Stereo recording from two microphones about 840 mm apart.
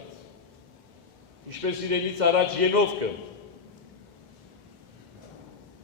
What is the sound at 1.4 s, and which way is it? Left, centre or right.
A man's voice, right.